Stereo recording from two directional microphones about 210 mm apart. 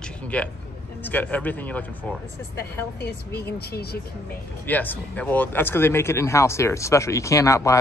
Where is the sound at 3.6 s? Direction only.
50° left (ahead or behind).